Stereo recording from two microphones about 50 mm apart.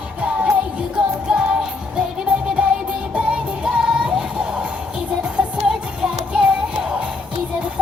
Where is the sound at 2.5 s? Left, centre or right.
Right.